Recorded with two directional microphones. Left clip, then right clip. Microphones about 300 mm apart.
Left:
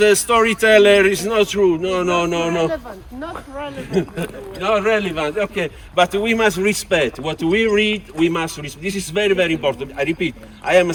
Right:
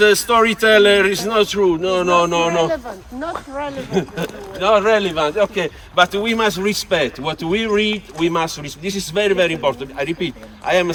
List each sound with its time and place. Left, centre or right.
0.0 s speech: centre
2.4 s speech: right
3.9 s speech: centre